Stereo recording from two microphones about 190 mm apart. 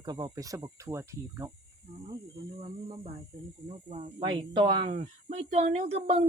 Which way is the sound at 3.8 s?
30° right (ahead or behind).